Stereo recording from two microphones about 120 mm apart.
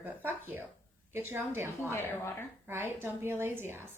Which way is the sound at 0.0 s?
15° right (ahead or behind).